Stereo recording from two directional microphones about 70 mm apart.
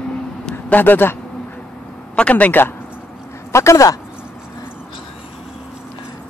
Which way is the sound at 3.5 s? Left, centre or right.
Left.